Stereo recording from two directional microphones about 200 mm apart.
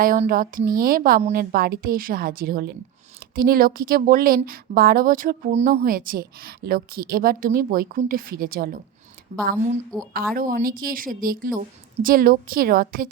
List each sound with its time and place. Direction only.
0.0 s a woman's voice: 45° right (ahead or behind)
5.8 s a woman's voice: 45° right (ahead or behind)
9.9 s a woman's voice: centre (ahead or behind)
10.3 s a woman's voice: 45° right (ahead or behind)